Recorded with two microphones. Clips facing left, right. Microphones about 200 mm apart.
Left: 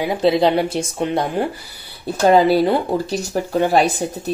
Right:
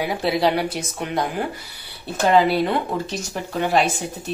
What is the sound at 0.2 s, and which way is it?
Speech, 25° left (ahead or behind).